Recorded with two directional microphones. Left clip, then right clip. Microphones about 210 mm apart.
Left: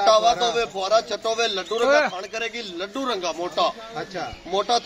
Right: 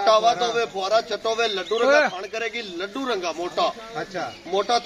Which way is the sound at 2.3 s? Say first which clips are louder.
Right 1 dB; 35° left (ahead or behind).